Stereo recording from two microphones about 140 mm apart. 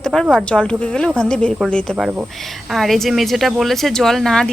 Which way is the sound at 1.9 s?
10° right (ahead or behind).